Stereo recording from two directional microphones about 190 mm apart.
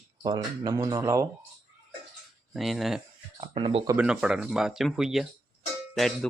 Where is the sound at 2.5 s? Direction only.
Centre (ahead or behind).